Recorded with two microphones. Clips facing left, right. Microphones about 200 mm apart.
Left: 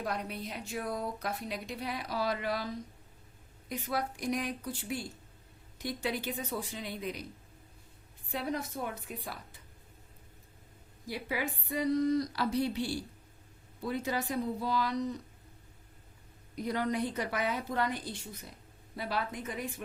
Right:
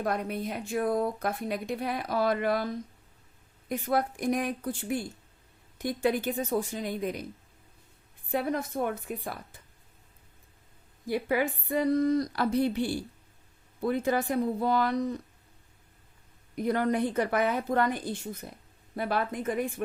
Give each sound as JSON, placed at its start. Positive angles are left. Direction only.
{"t": 0.0, "sound": "speech", "side_deg": -50}
{"t": 8.3, "sound": "speech", "side_deg": -55}
{"t": 11.0, "sound": "speech", "side_deg": -50}
{"t": 16.6, "sound": "speech", "side_deg": -55}